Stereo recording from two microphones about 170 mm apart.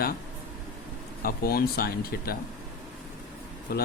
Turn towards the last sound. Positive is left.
turn(degrees=65)  # may be behind; listen again after turning